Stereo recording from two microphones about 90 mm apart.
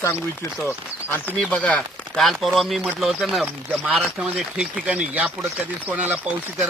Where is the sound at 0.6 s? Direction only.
30° left (ahead or behind).